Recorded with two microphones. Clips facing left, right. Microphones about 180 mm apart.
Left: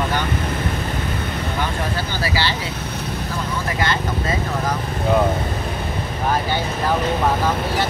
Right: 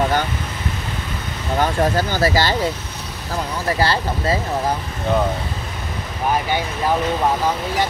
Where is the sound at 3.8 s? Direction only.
30° right (ahead or behind).